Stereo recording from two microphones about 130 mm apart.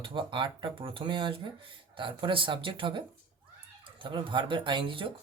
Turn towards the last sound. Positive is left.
turn(degrees=-40)  # may be behind; listen again after turning